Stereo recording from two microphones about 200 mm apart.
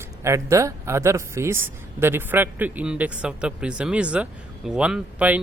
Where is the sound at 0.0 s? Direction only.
15° right (ahead or behind).